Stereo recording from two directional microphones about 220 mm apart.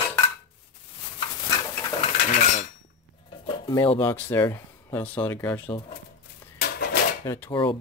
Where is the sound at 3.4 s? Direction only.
20° left (ahead or behind).